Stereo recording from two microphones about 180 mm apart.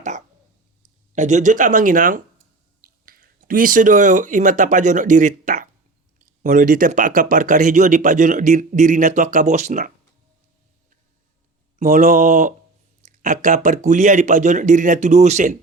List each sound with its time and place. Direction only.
1.1 s speech: 45° right (ahead or behind)
11.8 s speech: 50° right (ahead or behind)